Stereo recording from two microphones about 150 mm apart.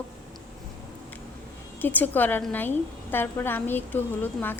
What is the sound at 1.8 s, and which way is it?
A woman's voice, 10° left (ahead or behind).